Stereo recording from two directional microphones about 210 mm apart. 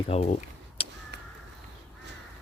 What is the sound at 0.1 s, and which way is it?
Speech, 35° left (ahead or behind).